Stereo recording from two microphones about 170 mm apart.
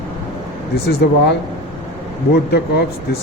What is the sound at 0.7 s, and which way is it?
Speech, 75° left (ahead or behind).